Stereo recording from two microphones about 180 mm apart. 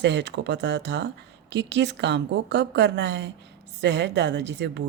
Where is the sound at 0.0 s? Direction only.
75° right (ahead or behind).